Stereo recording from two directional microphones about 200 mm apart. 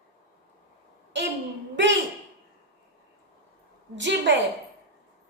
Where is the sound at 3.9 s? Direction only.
60° right (ahead or behind).